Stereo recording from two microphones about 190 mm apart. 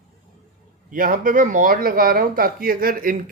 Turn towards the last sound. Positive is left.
turn(degrees=-45)  # may be behind; listen again after turning